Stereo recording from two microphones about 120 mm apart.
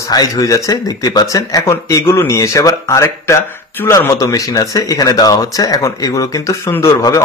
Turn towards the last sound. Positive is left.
turn(degrees=25)  # may be behind; listen again after turning